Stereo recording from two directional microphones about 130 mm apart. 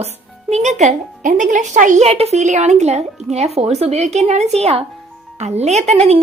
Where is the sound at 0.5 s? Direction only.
65° right (ahead or behind).